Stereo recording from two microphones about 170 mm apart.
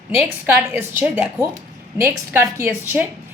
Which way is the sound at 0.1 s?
15° right (ahead or behind).